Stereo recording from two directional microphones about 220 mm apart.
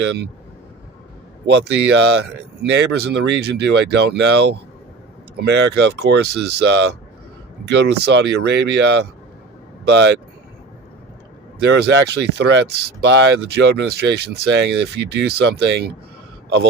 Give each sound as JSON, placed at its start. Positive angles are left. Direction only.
{"t": 0.0, "sound": "speech", "side_deg": -50}
{"t": 1.5, "sound": "speech", "side_deg": -50}
{"t": 11.6, "sound": "speech", "side_deg": -50}